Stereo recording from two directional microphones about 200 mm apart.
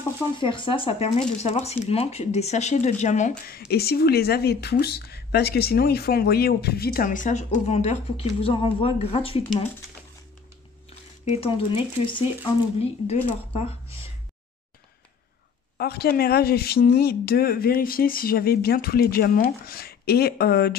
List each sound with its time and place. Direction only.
0.4 s speech: 25° left (ahead or behind)
11.2 s speech: 30° left (ahead or behind)
15.8 s speech: 50° left (ahead or behind)